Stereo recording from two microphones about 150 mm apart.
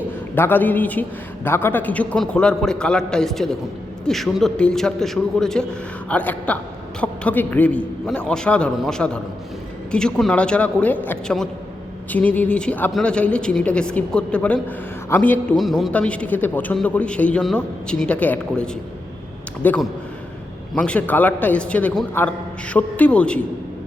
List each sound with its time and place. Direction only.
0.3 s a man's voice: 15° left (ahead or behind)
15.5 s a man's voice: centre (ahead or behind)